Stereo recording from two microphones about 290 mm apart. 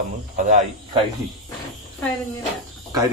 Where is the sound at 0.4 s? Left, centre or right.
Right.